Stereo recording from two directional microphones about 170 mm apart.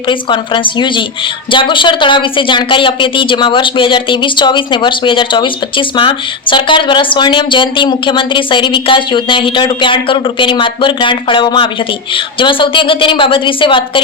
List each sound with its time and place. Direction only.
0.1 s speech: 30° left (ahead or behind)